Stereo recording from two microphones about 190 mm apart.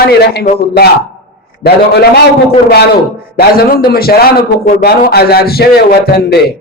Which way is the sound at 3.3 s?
55° left (ahead or behind).